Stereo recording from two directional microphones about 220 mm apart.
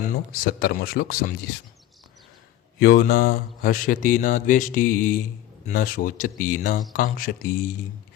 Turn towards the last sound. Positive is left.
turn(degrees=40)  # may be behind; listen again after turning